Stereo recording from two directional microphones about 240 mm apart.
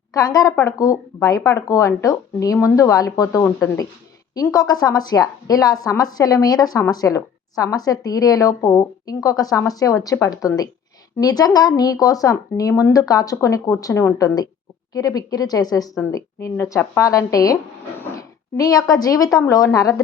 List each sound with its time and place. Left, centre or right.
0.1 s a woman's voice: centre